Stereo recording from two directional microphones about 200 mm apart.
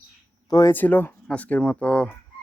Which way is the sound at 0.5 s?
15° left (ahead or behind).